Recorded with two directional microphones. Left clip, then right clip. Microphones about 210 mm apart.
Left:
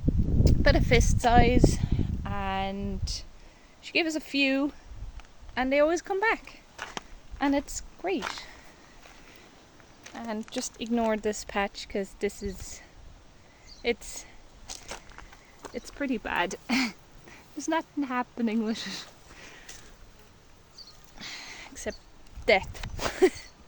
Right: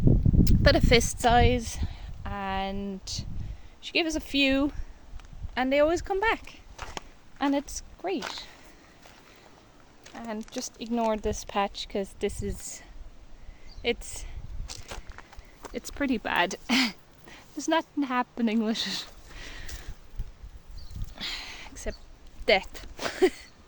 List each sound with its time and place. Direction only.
0.4 s a woman's voice: 20° right (ahead or behind); by 8.4 s centre (ahead or behind)
10.0 s speech: centre (ahead or behind); by 12.8 s 15° right (ahead or behind)
13.8 s speech: 5° right (ahead or behind)
14.7 s walk: 5° left (ahead or behind)
15.7 s speech: 20° right (ahead or behind)
21.2 s a sound: 20° right (ahead or behind)
21.9 s speech: 10° left (ahead or behind)
22.4 s speech: 5° right (ahead or behind)